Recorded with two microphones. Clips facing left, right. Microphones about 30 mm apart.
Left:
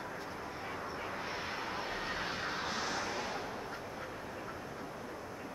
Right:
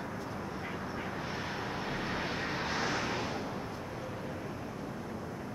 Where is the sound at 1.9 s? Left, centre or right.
Centre.